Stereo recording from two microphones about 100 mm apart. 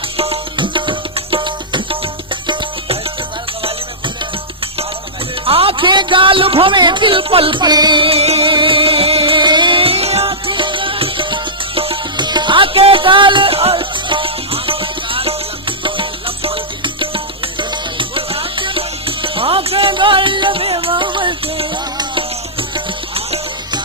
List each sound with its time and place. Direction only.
0.2 s music: 65° right (ahead or behind)
5.5 s a man's voice: 70° right (ahead or behind)
7.6 s music: 40° right (ahead or behind); by 9.4 s 70° right (ahead or behind)
9.4 s music: 50° right (ahead or behind); by 11.9 s 70° right (ahead or behind)
12.1 s music: 50° right (ahead or behind); by 23.4 s 70° right (ahead or behind)